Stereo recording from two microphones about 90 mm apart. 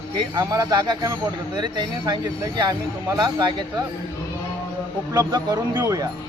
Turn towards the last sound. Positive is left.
turn(degrees=-40)  # may be behind; listen again after turning